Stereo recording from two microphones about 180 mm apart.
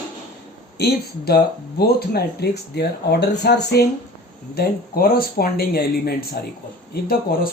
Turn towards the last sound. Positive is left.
turn(degrees=55)  # may be behind; listen again after turning